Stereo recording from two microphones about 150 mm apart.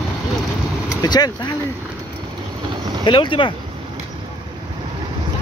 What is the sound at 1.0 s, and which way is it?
Speech, 25° left (ahead or behind).